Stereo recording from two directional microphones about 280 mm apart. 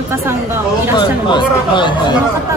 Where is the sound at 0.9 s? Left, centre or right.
Centre.